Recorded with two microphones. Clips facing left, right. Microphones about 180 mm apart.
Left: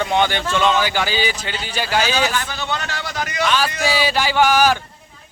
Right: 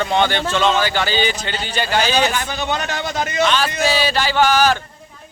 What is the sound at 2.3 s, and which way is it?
A man's voice, 15° right (ahead or behind).